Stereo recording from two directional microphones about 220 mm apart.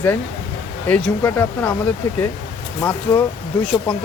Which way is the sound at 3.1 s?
15° left (ahead or behind).